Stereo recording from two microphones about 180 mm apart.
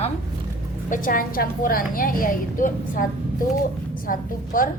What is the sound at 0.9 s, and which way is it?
A woman's voice, 50° left (ahead or behind).